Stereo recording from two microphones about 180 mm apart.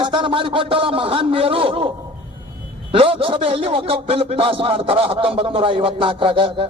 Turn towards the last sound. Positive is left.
turn(degrees=-30)  # may be behind; listen again after turning